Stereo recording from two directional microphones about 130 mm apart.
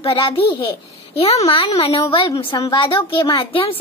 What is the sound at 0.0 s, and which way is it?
A woman's voice, 45° left (ahead or behind).